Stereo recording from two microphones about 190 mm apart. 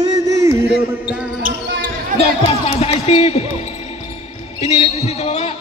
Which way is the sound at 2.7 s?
30° left (ahead or behind).